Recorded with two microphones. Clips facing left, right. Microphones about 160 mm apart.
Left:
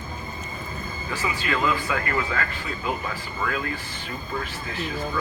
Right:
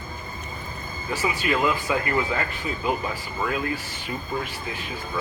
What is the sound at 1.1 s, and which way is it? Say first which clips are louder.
Speech: right 3 dB; 15° right (ahead or behind).